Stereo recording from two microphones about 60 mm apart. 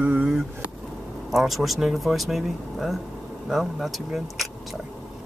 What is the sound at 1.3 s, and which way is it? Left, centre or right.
Speech, centre.